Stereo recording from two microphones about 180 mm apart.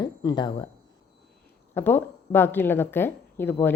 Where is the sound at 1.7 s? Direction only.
10° left (ahead or behind).